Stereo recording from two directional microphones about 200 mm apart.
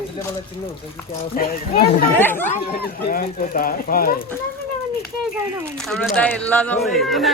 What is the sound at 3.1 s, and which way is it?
Speech, 45° left (ahead or behind).